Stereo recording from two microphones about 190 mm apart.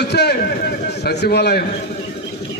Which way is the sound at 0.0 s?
60° left (ahead or behind).